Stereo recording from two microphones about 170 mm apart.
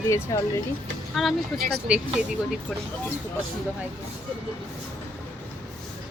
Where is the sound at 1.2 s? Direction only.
Centre (ahead or behind).